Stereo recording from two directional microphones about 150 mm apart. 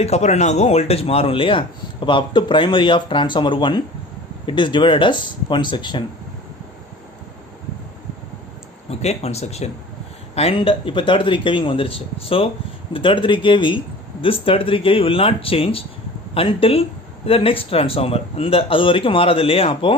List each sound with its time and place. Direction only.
0.0 s speech: 50° left (ahead or behind); by 6.1 s 30° left (ahead or behind)
8.9 s speech: 45° left (ahead or behind)